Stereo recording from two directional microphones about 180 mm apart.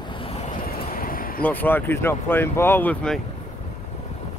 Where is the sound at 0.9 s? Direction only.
50° left (ahead or behind).